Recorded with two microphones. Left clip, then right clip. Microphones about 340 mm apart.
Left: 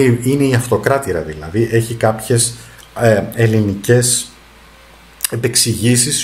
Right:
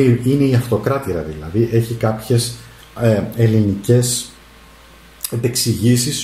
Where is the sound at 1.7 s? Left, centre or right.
Left.